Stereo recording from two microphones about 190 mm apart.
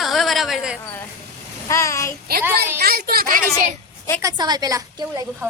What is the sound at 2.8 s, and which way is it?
Speech, 55° right (ahead or behind).